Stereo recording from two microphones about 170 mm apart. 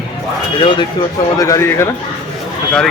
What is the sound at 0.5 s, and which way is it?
Speech, 30° left (ahead or behind).